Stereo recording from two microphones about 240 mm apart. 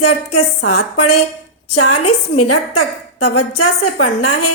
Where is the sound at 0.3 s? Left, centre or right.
Left.